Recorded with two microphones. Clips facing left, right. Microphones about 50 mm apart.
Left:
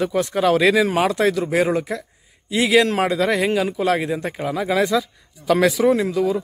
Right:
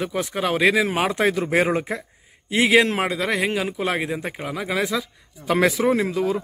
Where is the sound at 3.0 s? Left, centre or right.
Centre.